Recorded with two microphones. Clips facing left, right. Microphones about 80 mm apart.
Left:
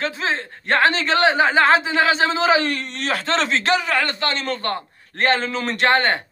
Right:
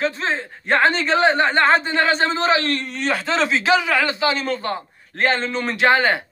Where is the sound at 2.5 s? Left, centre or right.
Centre.